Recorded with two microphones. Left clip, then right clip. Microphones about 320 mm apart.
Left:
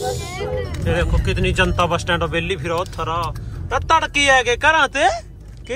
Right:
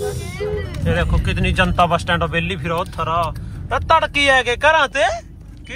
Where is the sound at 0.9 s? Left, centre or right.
Centre.